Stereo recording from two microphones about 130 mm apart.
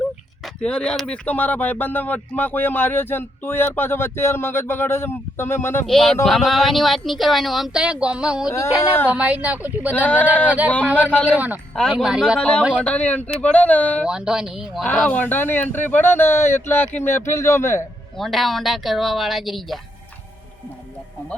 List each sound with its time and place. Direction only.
0.4 s speech: 5° left (ahead or behind)
5.8 s speech: 5° left (ahead or behind)
9.9 s speech: 10° left (ahead or behind)
11.3 s speech: 15° right (ahead or behind)
11.7 s speech: 5° left (ahead or behind)
12.4 s speech: 10° left (ahead or behind)
14.0 s speech: 5° right (ahead or behind)
14.8 s a man's voice: 10° left (ahead or behind)
18.2 s speech: centre (ahead or behind)